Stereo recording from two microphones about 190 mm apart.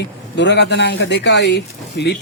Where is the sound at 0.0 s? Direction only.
65° left (ahead or behind).